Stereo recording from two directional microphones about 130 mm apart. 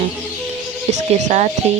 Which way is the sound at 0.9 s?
65° right (ahead or behind).